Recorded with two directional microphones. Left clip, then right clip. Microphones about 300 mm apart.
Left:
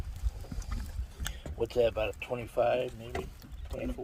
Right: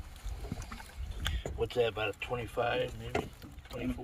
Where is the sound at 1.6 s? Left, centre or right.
Left.